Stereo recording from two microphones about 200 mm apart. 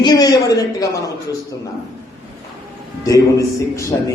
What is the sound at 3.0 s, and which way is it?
Speech, 15° left (ahead or behind).